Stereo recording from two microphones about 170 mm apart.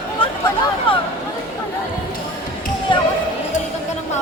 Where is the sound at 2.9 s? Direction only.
30° left (ahead or behind).